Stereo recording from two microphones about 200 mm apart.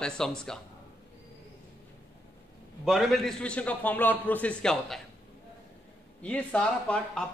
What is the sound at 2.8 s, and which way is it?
A man's voice, centre (ahead or behind).